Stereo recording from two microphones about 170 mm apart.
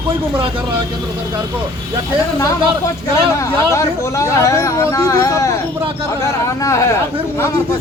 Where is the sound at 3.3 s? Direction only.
15° left (ahead or behind).